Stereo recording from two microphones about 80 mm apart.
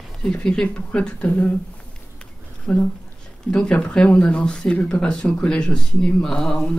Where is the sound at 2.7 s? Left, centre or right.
Centre.